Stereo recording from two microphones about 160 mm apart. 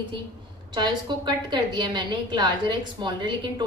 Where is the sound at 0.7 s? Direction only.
30° right (ahead or behind).